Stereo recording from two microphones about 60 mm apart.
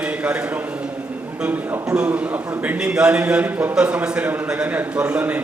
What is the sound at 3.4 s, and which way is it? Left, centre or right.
Speech, right.